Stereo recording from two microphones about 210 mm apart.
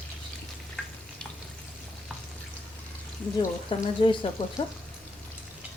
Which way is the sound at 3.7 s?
25° left (ahead or behind).